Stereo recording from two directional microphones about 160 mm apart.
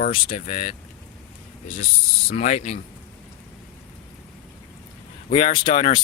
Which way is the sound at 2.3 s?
45° left (ahead or behind).